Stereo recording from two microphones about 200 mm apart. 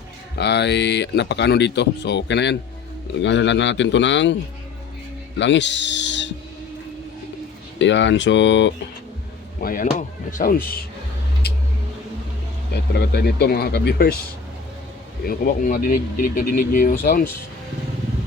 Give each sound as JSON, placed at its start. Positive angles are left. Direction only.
{"t": 0.3, "sound": "speech", "side_deg": 60}
{"t": 5.4, "sound": "speech", "side_deg": 65}
{"t": 7.8, "sound": "speech", "side_deg": 65}
{"t": 9.6, "sound": "speech", "side_deg": 45}
{"t": 12.7, "sound": "speech", "side_deg": 55}
{"t": 15.3, "sound": "speech", "side_deg": 45}